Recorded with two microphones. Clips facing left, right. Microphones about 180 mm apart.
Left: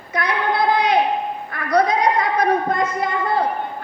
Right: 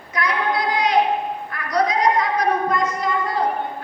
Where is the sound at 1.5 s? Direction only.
55° left (ahead or behind).